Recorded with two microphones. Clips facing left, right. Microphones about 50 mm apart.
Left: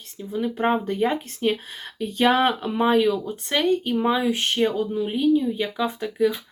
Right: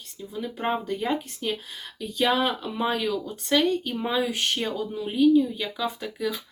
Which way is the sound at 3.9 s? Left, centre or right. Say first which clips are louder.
Left 6 dB; centre.